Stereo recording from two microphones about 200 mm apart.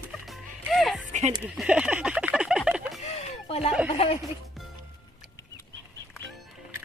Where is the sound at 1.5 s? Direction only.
5° right (ahead or behind).